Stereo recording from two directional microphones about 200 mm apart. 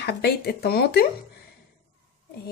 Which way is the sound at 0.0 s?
55° left (ahead or behind).